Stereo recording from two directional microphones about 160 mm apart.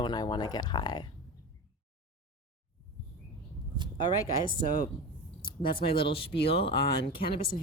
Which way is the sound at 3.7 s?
30° right (ahead or behind).